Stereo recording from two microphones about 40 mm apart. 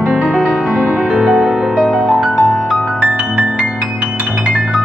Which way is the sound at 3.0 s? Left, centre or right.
Right.